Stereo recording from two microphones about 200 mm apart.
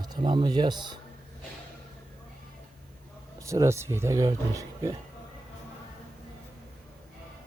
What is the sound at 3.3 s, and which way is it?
Speech, 15° right (ahead or behind).